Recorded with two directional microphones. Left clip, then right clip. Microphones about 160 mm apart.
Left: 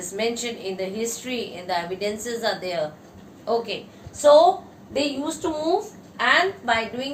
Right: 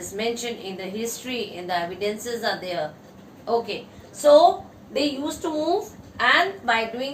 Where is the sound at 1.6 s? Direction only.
25° left (ahead or behind).